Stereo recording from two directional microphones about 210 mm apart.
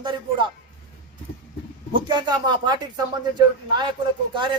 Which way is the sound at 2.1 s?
20° right (ahead or behind).